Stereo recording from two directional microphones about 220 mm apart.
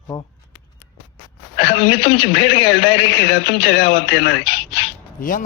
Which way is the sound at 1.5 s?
25° left (ahead or behind).